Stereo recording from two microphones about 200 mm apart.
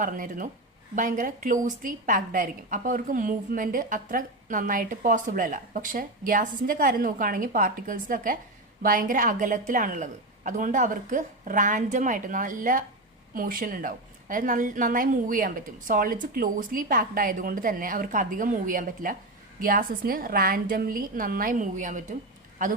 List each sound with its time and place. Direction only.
0.0 s a woman's voice: 45° right (ahead or behind)